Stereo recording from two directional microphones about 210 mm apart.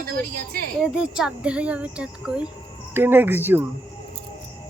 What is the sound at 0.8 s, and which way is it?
Speech, 5° right (ahead or behind).